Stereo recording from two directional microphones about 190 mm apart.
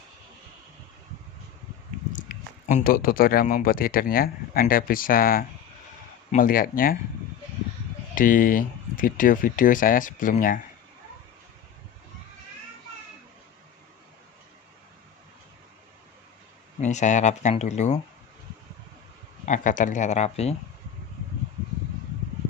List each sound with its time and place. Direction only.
2.1 s speech: 40° left (ahead or behind)
8.1 s speech: 45° left (ahead or behind)
16.8 s speech: 40° left (ahead or behind)
19.5 s speech: 40° left (ahead or behind)